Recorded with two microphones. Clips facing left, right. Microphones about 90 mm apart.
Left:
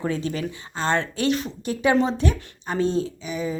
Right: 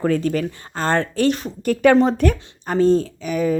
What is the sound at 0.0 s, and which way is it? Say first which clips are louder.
Speech: right 6 dB; 50° right (ahead or behind).